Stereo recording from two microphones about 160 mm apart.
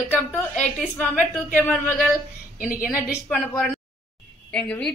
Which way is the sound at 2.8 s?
60° left (ahead or behind).